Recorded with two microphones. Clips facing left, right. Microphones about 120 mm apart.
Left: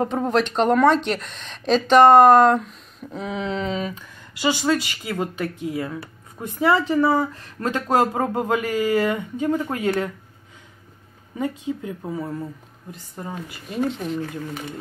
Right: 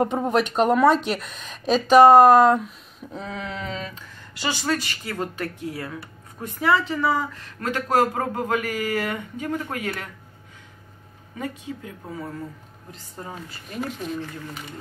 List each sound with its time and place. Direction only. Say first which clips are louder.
0.0 s speech: even; 10° right (ahead or behind)
3.3 s speech: left 7 dB; 20° left (ahead or behind)
6.4 s speech: left 2 dB; 25° left (ahead or behind)
11.3 s speech: left 6 dB; 25° left (ahead or behind)
13.7 s speech: left 5 dB; 20° left (ahead or behind)